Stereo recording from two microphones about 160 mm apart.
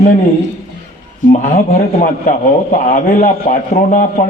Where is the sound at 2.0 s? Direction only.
50° left (ahead or behind).